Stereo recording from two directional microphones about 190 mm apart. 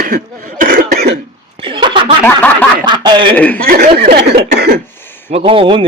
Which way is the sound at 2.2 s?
10° left (ahead or behind).